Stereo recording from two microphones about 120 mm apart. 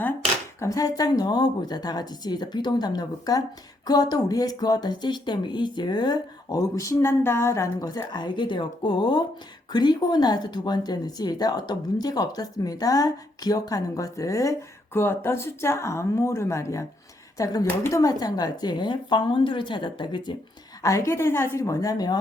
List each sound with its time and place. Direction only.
0.6 s speech: 30° left (ahead or behind)
20.8 s speech: 25° left (ahead or behind)